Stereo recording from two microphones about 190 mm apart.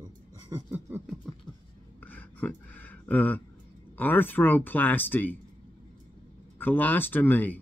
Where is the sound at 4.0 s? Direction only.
10° left (ahead or behind).